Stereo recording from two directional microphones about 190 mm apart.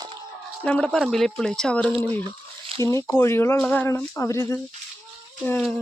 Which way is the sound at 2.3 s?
20° right (ahead or behind).